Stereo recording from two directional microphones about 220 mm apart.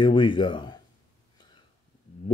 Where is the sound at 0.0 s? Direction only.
20° left (ahead or behind).